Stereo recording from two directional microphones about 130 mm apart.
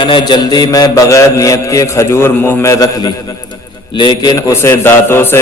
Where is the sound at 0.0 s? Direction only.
35° left (ahead or behind).